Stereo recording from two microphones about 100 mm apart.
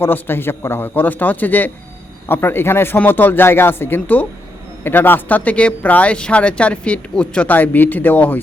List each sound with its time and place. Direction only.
0.0 s speech: 20° left (ahead or behind)